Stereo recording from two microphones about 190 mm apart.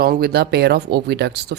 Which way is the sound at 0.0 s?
50° right (ahead or behind).